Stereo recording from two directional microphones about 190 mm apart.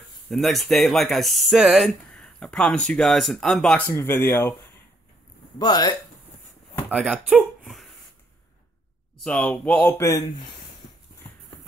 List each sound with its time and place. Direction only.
0.3 s speech: centre (ahead or behind)
5.6 s speech: 20° left (ahead or behind)
6.9 s speech: 5° right (ahead or behind)
9.2 s speech: 5° left (ahead or behind)